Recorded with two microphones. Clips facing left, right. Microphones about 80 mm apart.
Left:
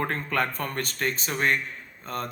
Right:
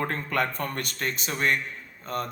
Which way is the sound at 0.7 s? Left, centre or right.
Left.